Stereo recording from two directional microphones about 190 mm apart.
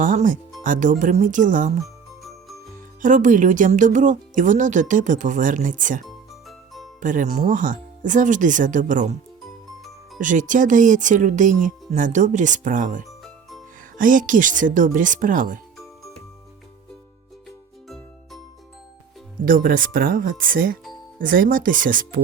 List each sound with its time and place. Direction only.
0.0 s speech: 45° right (ahead or behind)
1.8 s music: centre (ahead or behind)
3.0 s speech: 40° right (ahead or behind)
10.2 s speech: 40° right (ahead or behind)
17.8 s music: centre (ahead or behind)
19.5 s speech: 45° right (ahead or behind)